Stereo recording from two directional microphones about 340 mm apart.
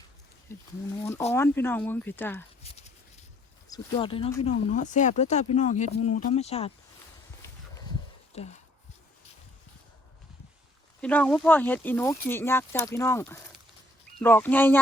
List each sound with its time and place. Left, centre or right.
0.5 s speech: centre
3.7 s speech: centre
8.3 s speech: centre
11.0 s speech: centre